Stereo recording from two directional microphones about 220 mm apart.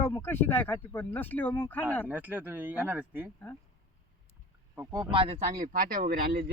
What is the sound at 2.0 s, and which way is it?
Speech, 10° right (ahead or behind).